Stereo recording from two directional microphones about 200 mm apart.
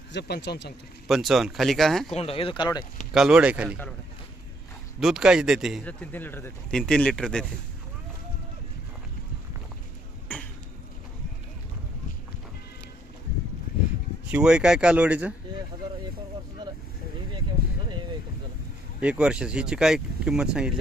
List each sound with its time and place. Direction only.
0.1 s speech: 55° left (ahead or behind)
1.0 s a man's voice: centre (ahead or behind)
2.1 s speech: 30° left (ahead or behind)
3.1 s a man's voice: 5° right (ahead or behind)
4.9 s a man's voice: centre (ahead or behind)
14.3 s a man's voice: 5° right (ahead or behind)
19.0 s a man's voice: 5° right (ahead or behind)